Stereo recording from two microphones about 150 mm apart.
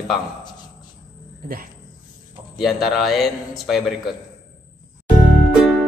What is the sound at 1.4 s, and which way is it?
Speech, 70° right (ahead or behind).